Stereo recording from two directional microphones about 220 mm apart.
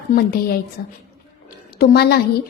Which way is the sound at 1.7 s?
45° left (ahead or behind).